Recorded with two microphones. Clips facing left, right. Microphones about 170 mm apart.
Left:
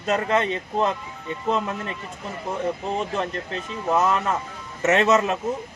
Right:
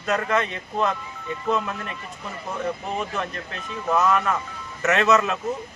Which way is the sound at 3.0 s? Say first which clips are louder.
Left 3 dB; 25° left (ahead or behind).